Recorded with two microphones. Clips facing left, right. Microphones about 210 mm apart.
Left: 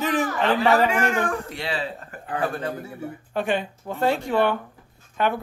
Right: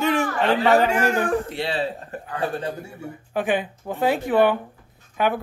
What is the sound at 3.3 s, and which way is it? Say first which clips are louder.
A man's voice: right 2 dB; 5° right (ahead or behind).